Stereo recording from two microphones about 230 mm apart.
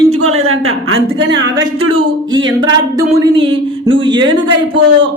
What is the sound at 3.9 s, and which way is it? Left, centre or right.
Speech, centre.